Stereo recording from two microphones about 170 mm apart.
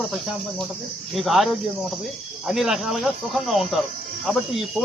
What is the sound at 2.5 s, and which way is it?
Speech, centre (ahead or behind).